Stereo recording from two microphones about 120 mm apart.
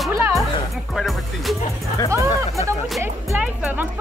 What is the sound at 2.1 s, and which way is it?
Speech, 25° right (ahead or behind).